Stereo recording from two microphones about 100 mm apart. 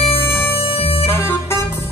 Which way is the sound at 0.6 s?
80° left.